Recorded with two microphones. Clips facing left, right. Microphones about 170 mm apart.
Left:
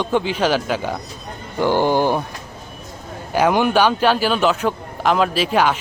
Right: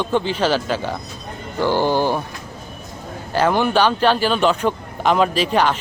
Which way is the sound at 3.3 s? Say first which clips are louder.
Left 1 dB; 10° left (ahead or behind).